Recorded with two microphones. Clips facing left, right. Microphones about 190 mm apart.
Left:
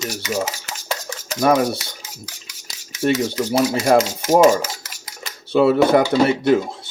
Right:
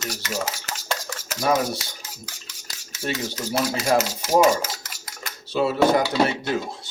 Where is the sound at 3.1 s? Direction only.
60° left (ahead or behind).